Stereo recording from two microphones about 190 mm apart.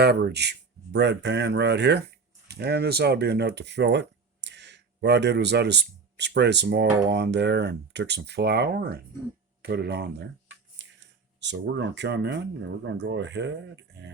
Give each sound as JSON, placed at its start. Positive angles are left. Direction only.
{"t": 0.0, "sound": "speech", "side_deg": -60}